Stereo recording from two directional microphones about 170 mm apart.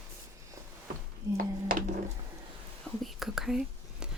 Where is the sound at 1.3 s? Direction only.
55° right (ahead or behind).